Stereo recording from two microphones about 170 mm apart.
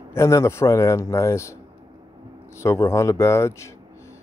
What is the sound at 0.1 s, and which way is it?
Speech, 15° left (ahead or behind).